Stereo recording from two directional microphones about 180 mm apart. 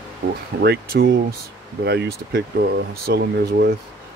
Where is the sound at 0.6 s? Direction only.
60° right (ahead or behind).